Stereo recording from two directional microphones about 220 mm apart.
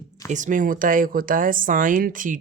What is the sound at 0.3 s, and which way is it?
Speech, 35° right (ahead or behind).